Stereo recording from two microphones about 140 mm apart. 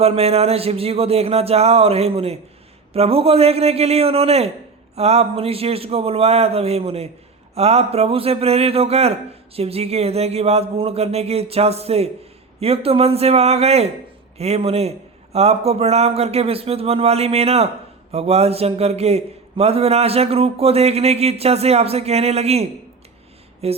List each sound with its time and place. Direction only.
0.0 s a man's voice: 45° right (ahead or behind)
23.6 s a man's voice: 45° right (ahead or behind)